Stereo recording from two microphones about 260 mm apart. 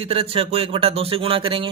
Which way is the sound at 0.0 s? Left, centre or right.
Right.